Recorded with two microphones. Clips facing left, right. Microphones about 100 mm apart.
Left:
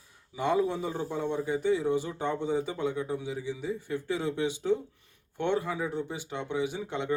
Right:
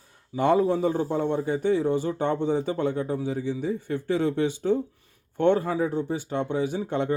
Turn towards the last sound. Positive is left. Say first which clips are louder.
# right 6 dB
turn(degrees=-45)  # may be behind; listen again after turning